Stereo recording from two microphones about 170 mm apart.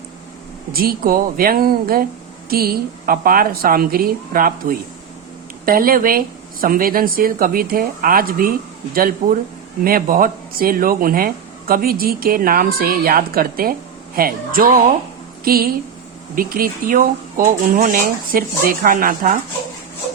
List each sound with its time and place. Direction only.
0.7 s speech: 60° right (ahead or behind)